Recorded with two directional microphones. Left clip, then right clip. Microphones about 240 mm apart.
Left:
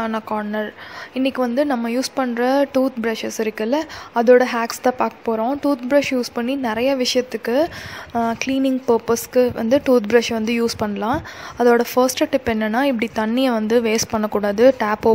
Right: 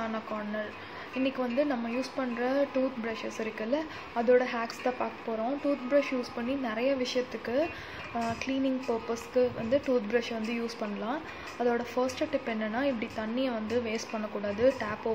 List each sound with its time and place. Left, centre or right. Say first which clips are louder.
0.0 s a woman's voice: left 11 dB; left